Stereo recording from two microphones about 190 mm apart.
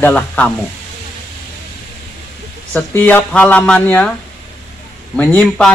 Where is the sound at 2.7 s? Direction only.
10° left (ahead or behind).